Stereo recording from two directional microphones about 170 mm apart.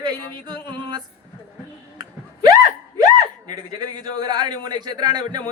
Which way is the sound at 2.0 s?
25° right (ahead or behind).